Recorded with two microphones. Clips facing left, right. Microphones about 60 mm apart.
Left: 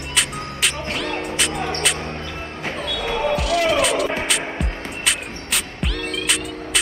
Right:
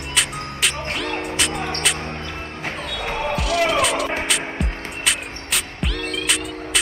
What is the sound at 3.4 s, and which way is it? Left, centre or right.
Music, centre.